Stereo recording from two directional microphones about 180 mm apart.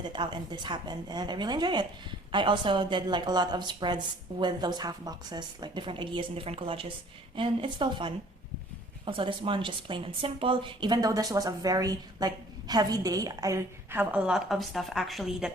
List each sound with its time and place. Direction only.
0.0 s a woman's voice: 25° right (ahead or behind); by 15.5 s centre (ahead or behind)